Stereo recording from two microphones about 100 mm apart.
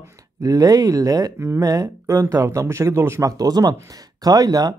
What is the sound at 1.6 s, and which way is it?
Speech, 40° right (ahead or behind).